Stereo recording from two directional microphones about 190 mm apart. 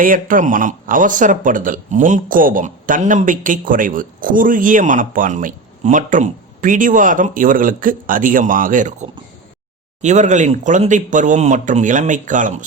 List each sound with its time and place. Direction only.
0.0 s speech: 45° right (ahead or behind)